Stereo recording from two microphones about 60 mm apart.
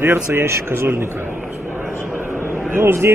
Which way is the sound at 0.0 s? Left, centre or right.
Right.